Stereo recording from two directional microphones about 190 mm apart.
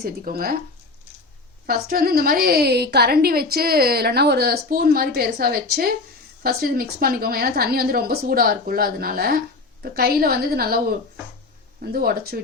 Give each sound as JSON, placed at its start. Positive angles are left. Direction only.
{"t": 0.0, "sound": "a woman's voice", "side_deg": -50}
{"t": 1.6, "sound": "a woman's voice", "side_deg": -50}